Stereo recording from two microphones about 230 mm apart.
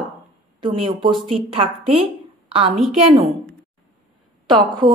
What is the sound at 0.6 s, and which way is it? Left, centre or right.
Speech, right.